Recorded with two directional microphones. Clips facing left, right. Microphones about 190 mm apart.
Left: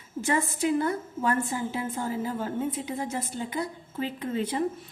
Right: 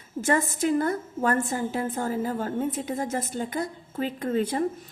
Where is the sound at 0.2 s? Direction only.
45° right (ahead or behind).